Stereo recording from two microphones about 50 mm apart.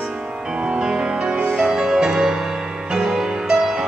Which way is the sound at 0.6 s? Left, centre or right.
Centre.